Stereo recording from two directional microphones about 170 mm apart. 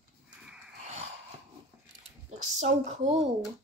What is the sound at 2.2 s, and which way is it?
Speech, 45° right (ahead or behind).